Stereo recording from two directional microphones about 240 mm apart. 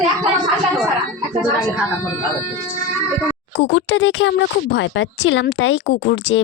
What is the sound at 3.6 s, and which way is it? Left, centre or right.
A woman's voice, left.